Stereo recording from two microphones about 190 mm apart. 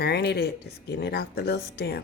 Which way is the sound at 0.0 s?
60° left (ahead or behind).